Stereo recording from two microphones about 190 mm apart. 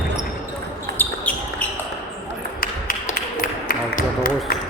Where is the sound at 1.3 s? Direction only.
5° left (ahead or behind).